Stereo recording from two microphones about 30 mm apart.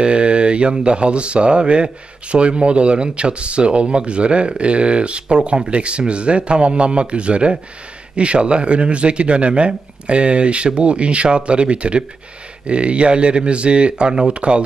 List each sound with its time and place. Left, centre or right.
0.0 s speech: right